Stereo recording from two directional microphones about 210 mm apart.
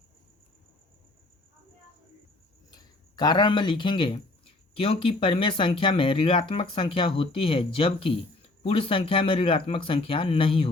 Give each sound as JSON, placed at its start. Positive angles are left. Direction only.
{"t": 2.6, "sound": "speech", "side_deg": 20}